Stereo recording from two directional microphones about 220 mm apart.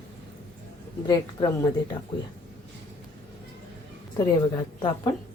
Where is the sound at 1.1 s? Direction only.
20° left (ahead or behind).